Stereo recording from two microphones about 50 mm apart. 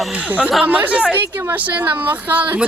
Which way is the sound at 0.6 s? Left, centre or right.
Right.